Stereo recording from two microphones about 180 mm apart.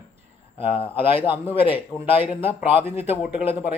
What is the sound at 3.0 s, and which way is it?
Speech, 10° right (ahead or behind).